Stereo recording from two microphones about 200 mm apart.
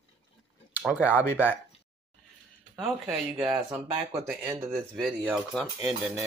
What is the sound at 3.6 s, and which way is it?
Speech, 20° right (ahead or behind).